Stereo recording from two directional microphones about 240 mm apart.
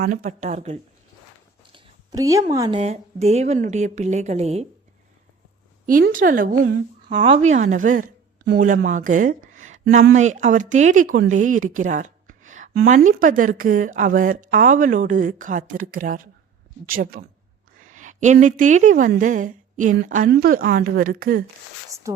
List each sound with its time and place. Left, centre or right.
0.0 s a woman's voice: right
1.7 s a sound: centre
2.5 s a woman's voice: centre
5.8 s a woman's voice: right
7.1 s a woman's voice: right
21.8 s rub: centre